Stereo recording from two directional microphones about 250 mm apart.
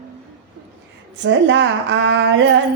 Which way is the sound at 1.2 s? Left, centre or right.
Right.